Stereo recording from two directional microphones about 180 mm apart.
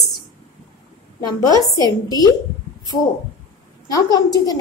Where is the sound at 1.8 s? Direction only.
20° left (ahead or behind).